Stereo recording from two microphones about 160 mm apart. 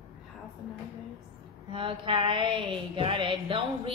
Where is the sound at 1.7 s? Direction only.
30° right (ahead or behind).